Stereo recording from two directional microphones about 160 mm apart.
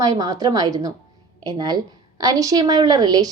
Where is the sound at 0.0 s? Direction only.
25° right (ahead or behind).